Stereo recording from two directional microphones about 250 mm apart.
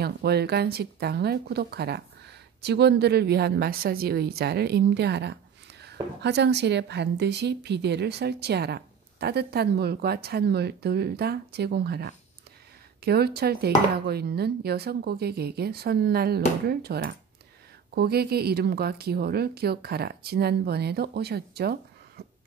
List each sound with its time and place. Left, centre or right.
0.0 s speech: right